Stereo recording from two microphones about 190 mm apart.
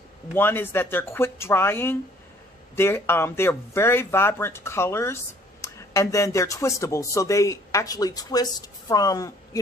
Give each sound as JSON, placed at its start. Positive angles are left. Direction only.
{"t": 0.3, "sound": "speech", "side_deg": 10}